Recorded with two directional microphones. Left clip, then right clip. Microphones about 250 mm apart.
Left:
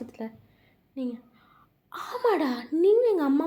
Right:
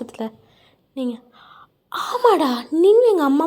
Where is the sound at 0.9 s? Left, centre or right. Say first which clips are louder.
Right 8 dB; right.